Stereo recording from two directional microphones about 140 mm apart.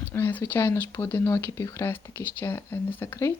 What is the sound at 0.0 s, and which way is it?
Speech, 15° left (ahead or behind).